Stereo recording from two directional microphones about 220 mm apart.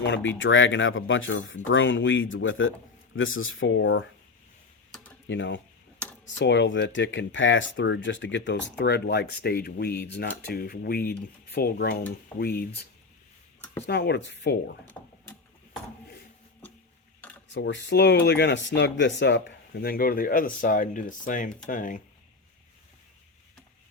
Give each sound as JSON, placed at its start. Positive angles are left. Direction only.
{"t": 0.0, "sound": "speech", "side_deg": 55}
{"t": 5.3, "sound": "speech", "side_deg": 55}
{"t": 14.8, "sound": "mechanisms", "side_deg": 10}
{"t": 17.5, "sound": "speech", "side_deg": 55}